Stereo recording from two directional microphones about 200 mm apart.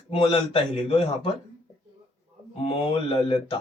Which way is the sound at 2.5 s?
25° left (ahead or behind).